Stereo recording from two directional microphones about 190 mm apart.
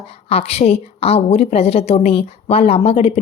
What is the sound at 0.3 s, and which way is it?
A woman's voice, 35° left (ahead or behind).